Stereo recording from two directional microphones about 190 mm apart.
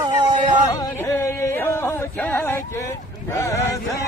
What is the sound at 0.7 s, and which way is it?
Music, 15° left (ahead or behind).